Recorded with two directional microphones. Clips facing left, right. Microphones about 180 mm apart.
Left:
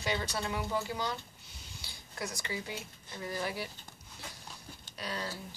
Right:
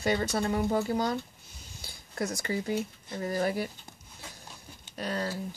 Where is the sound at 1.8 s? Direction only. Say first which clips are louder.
Right 7 dB; 45° right (ahead or behind).